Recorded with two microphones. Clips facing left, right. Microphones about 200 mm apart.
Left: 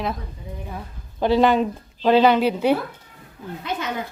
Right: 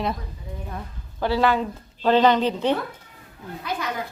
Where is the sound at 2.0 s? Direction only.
10° left (ahead or behind).